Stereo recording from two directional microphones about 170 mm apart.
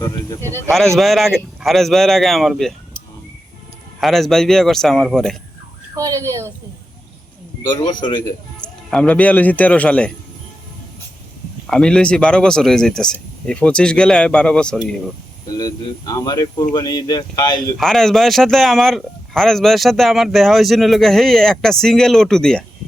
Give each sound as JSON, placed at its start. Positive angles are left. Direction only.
{"t": 0.9, "sound": "speech", "side_deg": 0}
{"t": 4.0, "sound": "speech", "side_deg": 0}
{"t": 6.0, "sound": "a child's voice", "side_deg": -20}
{"t": 7.8, "sound": "a man's voice", "side_deg": 25}
{"t": 8.9, "sound": "a man's voice", "side_deg": 5}
{"t": 11.6, "sound": "speech", "side_deg": 5}
{"t": 15.5, "sound": "speech", "side_deg": 20}
{"t": 17.7, "sound": "speech", "side_deg": 0}